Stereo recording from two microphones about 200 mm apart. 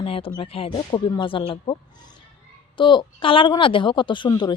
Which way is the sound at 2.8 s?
25° left (ahead or behind).